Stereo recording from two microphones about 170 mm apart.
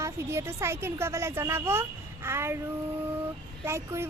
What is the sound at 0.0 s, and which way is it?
A woman's voice, 15° right (ahead or behind).